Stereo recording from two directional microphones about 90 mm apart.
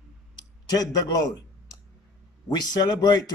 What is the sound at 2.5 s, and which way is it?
Speech, 50° left (ahead or behind).